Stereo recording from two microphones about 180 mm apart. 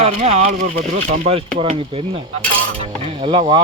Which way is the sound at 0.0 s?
40° right (ahead or behind).